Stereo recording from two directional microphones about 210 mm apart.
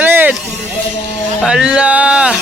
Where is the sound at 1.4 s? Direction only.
5° right (ahead or behind).